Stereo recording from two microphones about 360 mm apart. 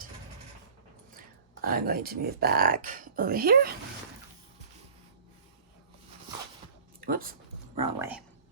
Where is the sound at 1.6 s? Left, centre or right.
Right.